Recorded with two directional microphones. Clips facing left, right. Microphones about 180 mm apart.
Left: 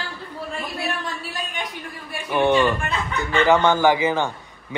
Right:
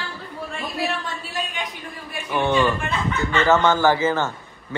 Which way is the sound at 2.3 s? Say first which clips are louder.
Left 2 dB; 15° left (ahead or behind).